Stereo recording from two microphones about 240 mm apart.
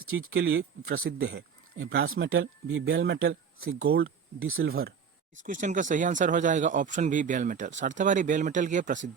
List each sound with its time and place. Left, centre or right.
0.0 s speech: right
4.7 s speech: right